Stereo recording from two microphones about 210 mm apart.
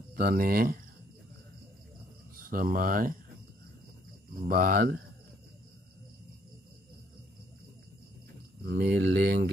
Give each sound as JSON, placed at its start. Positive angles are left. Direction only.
{"t": 0.1, "sound": "speech", "side_deg": -45}
{"t": 2.3, "sound": "speech", "side_deg": -45}
{"t": 4.4, "sound": "speech", "side_deg": -45}
{"t": 8.6, "sound": "speech", "side_deg": -50}